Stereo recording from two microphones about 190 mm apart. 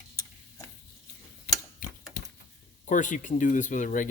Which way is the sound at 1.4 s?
50° left (ahead or behind).